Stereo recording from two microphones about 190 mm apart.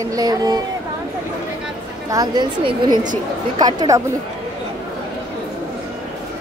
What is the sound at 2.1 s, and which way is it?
Speech, 20° right (ahead or behind).